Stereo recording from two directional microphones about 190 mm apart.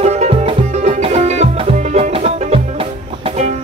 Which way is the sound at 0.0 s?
35° right (ahead or behind).